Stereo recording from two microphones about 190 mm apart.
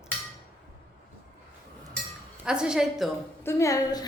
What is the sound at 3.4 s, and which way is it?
Speech, 15° left (ahead or behind).